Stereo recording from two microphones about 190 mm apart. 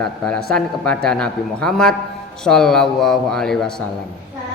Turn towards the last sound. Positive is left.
turn(degrees=5)  # may be behind; listen again after turning